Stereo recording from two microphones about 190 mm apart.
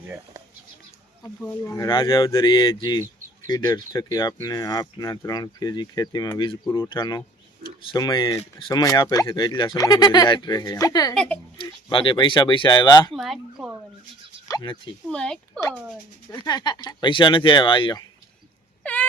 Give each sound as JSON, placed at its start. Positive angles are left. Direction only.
{"t": 1.4, "sound": "speech", "side_deg": 15}
{"t": 11.1, "sound": "speech", "side_deg": 5}
{"t": 11.5, "sound": "speech", "side_deg": 25}
{"t": 13.1, "sound": "speech", "side_deg": 0}
{"t": 14.4, "sound": "speech", "side_deg": 20}
{"t": 15.1, "sound": "speech", "side_deg": 5}
{"t": 16.3, "sound": "speech", "side_deg": 20}
{"t": 18.8, "sound": "a sound", "side_deg": 10}